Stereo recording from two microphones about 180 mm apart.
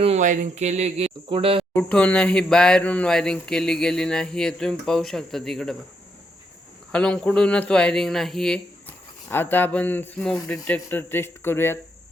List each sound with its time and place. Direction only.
0.0 s speech: 40° right (ahead or behind)
1.7 s speech: 10° left (ahead or behind)
6.9 s speech: 5° left (ahead or behind)